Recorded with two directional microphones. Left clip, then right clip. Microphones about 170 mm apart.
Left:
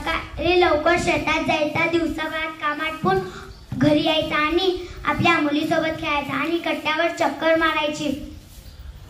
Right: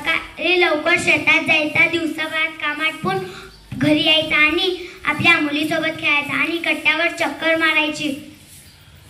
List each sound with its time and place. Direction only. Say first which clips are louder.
0.0 s a woman's voice: right 4 dB; 30° left (ahead or behind)